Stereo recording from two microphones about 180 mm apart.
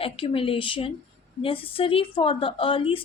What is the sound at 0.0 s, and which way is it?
A woman's voice, 30° left (ahead or behind).